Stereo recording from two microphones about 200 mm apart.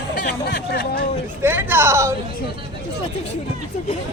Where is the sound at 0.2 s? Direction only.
55° left (ahead or behind).